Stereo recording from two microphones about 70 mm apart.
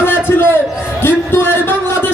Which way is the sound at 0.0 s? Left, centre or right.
Left.